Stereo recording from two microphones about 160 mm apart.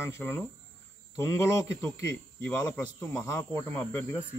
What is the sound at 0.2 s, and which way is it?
Speech, 10° left (ahead or behind).